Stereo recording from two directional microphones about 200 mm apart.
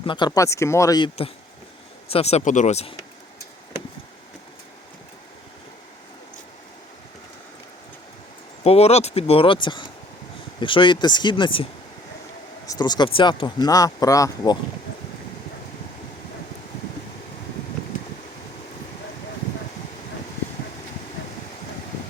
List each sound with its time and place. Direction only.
0.0 s speech: 25° left (ahead or behind)
8.6 s speech: 30° left (ahead or behind)
12.6 s speech: 20° left (ahead or behind)